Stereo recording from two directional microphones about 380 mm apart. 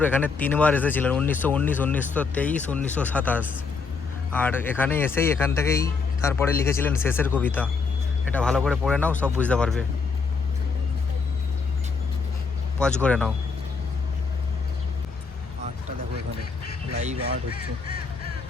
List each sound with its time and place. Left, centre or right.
0.0 s speech: centre
13.0 s speech: centre